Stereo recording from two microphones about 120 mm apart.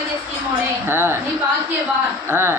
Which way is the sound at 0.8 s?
20° right (ahead or behind).